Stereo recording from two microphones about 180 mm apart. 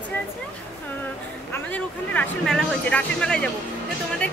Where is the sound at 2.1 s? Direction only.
5° left (ahead or behind).